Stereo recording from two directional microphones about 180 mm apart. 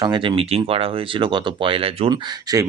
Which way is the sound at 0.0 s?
25° right (ahead or behind).